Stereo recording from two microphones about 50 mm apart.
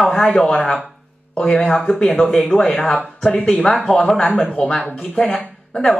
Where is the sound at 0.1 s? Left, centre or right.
Centre.